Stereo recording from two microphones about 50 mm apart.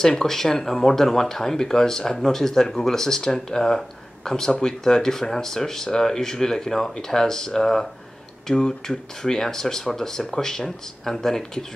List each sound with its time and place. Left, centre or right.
0.0 s speech: centre